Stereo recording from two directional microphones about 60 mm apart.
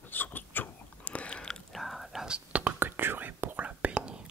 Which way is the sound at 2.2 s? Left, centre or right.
Centre.